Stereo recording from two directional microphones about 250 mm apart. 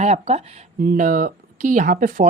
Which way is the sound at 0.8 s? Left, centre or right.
Right.